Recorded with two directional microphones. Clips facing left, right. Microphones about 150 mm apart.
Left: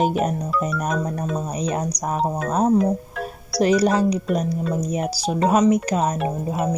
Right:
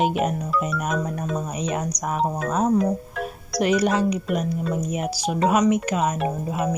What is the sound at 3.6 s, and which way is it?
Speech, 35° left (ahead or behind).